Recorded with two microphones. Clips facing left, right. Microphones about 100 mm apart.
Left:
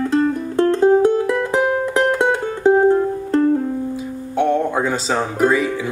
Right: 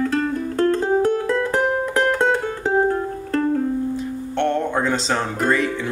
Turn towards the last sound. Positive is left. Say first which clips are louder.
# left 3 dB
turn(degrees=5)  # may be behind; listen again after turning